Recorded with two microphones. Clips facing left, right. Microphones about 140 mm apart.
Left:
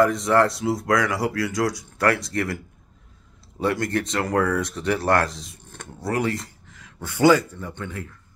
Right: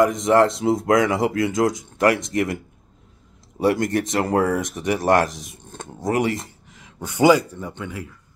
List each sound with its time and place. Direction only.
0.0 s speech: 20° right (ahead or behind)